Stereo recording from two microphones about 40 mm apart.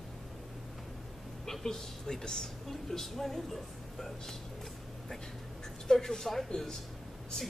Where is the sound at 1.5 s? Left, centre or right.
Centre.